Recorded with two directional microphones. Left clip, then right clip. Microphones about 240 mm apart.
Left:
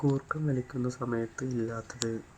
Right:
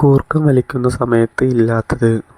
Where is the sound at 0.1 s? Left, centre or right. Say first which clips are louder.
Right 18 dB; right.